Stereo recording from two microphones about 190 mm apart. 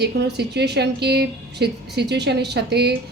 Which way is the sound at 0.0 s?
60° right (ahead or behind).